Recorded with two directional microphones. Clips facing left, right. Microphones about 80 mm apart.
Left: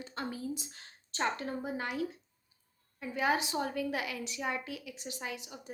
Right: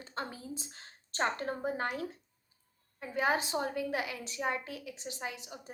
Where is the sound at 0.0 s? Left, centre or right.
Right.